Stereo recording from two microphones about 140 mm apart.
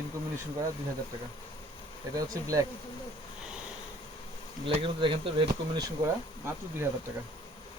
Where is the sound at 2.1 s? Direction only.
25° right (ahead or behind).